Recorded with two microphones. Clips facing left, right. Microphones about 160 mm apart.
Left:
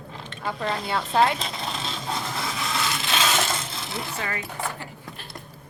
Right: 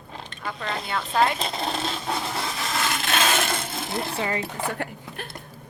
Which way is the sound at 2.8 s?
55° right (ahead or behind).